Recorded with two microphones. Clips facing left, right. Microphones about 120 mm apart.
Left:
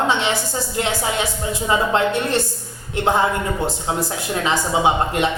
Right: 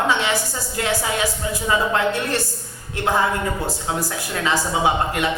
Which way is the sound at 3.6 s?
25° left (ahead or behind).